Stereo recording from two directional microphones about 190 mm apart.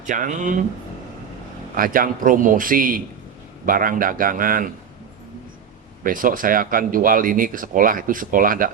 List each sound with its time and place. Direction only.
0.1 s speech: 40° right (ahead or behind)
1.7 s speech: 45° right (ahead or behind)
6.0 s speech: 45° right (ahead or behind)